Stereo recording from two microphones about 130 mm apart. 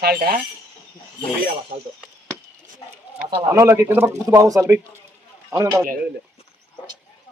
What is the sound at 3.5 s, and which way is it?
A man's voice, 25° right (ahead or behind).